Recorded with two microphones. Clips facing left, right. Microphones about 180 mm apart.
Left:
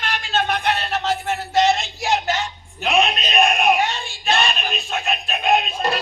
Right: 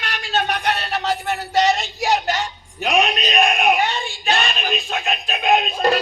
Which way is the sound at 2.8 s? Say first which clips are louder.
Even; 40° right (ahead or behind).